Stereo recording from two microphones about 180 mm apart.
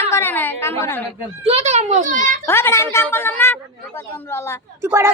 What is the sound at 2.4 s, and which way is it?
A woman's voice, 15° left (ahead or behind).